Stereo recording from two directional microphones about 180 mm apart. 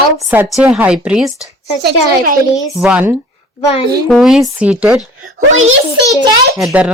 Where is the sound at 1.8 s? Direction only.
60° right (ahead or behind).